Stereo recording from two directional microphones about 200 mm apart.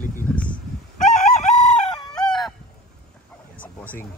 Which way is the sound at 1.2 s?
35° left (ahead or behind).